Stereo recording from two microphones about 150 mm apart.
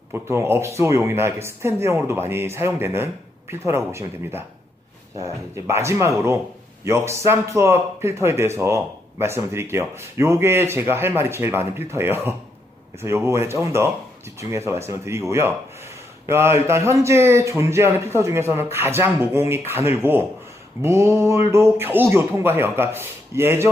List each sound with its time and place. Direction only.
0.1 s speech: 15° right (ahead or behind)